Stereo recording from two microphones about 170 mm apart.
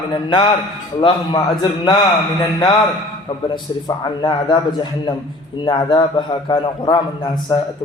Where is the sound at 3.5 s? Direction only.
25° left (ahead or behind).